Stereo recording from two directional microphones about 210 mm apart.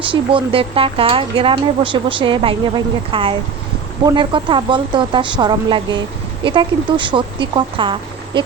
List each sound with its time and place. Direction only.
0.0 s speech: 25° right (ahead or behind)